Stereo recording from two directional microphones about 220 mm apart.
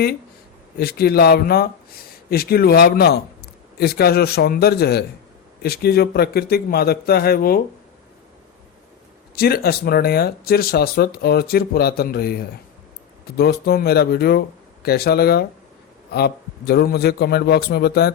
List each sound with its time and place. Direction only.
0.8 s speech: 45° left (ahead or behind)
9.3 s speech: 45° left (ahead or behind)